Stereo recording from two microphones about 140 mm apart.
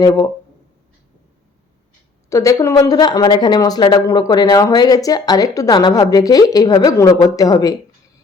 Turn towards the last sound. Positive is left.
turn(degrees=25)  # may be behind; listen again after turning